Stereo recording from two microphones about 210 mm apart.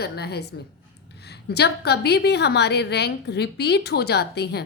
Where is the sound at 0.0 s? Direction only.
50° left (ahead or behind).